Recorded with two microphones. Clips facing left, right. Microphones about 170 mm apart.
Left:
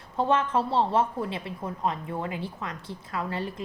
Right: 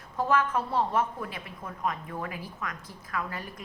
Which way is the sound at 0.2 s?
30° left (ahead or behind).